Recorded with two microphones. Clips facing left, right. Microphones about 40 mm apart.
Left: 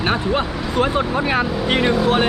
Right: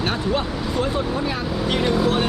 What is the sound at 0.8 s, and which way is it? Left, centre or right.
Speech, left.